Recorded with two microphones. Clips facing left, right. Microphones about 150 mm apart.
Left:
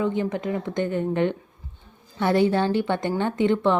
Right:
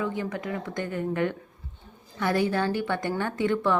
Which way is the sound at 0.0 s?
25° left (ahead or behind).